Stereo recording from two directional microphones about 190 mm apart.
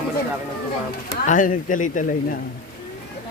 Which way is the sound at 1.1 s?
45° left (ahead or behind).